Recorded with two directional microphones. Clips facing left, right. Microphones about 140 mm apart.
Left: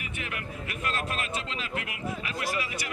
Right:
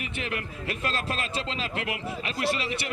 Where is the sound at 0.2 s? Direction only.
30° right (ahead or behind).